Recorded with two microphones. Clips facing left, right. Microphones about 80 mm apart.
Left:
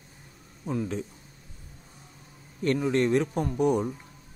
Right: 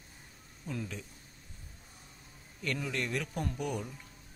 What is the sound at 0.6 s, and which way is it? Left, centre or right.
Speech, left.